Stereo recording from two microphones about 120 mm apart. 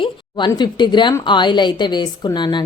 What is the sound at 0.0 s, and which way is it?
A woman's voice, 40° left (ahead or behind).